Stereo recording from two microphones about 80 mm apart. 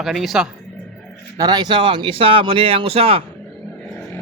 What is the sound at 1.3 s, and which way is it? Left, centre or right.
Speech, right.